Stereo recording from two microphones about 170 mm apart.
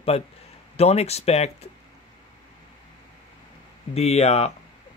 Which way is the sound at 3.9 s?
40° left (ahead or behind).